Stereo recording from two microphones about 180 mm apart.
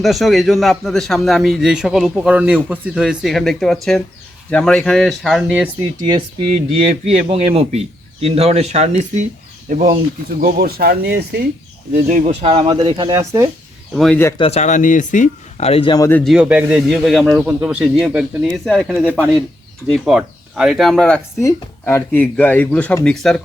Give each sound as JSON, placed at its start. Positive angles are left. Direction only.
{"t": 0.0, "sound": "a man's voice", "side_deg": 0}
{"t": 6.0, "sound": "speech", "side_deg": -25}
{"t": 6.5, "sound": "a man's voice", "side_deg": -35}
{"t": 11.9, "sound": "speech", "side_deg": -45}
{"t": 13.9, "sound": "a man's voice", "side_deg": 0}
{"t": 14.3, "sound": "speech", "side_deg": 35}
{"t": 16.0, "sound": "speech", "side_deg": 10}
{"t": 16.3, "sound": "a man's voice", "side_deg": -5}
{"t": 21.4, "sound": "speech", "side_deg": 15}